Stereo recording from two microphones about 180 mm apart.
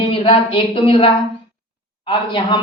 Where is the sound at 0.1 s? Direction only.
30° left (ahead or behind).